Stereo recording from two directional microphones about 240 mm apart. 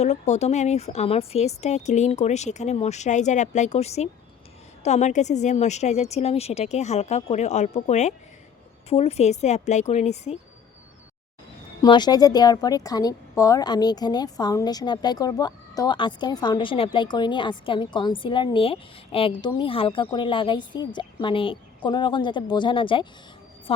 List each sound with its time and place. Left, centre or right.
0.0 s a woman's voice: left
11.8 s a woman's voice: centre